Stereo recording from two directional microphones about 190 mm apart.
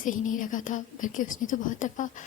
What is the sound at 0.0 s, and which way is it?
A woman's voice, 45° left (ahead or behind).